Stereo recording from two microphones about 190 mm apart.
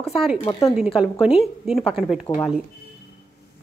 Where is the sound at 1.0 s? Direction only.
5° right (ahead or behind).